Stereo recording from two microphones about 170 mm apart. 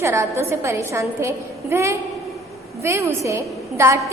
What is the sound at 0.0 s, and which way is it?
A woman's voice, 15° right (ahead or behind).